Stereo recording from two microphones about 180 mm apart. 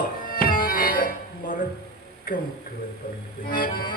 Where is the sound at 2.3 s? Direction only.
55° left (ahead or behind).